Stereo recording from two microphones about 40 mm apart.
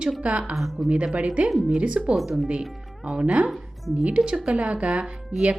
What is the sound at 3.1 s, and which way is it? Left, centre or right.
A woman's voice, right.